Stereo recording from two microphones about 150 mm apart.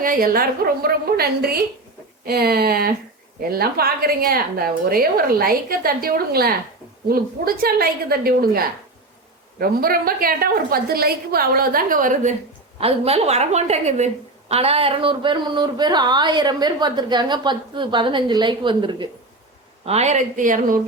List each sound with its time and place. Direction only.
0.0 s a woman's voice: 70° right (ahead or behind)
12.8 s a woman's voice: 40° right (ahead or behind)
19.8 s a woman's voice: 45° right (ahead or behind); by 20.7 s 60° right (ahead or behind)